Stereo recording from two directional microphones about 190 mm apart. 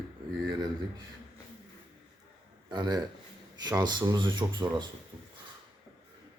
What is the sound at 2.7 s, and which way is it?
Speech, 20° right (ahead or behind).